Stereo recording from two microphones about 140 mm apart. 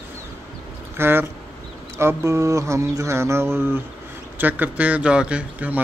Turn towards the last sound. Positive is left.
turn(degrees=-10)  # may be behind; listen again after turning